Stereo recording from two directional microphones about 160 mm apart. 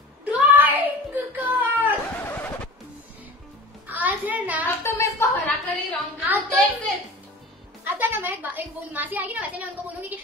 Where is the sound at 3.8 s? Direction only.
10° right (ahead or behind).